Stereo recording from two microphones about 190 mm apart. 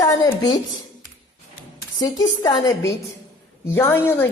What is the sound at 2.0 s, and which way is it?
A woman's voice, 20° left (ahead or behind).